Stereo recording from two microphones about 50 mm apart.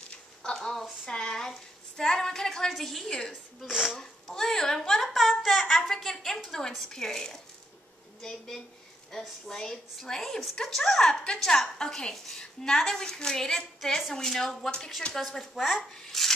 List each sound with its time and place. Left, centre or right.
0.1 s a sound: centre
1.0 s a woman's voice: centre
3.6 s speech: centre
4.0 s a sound: centre
5.8 s a woman's voice: centre
15.9 s a woman's voice: centre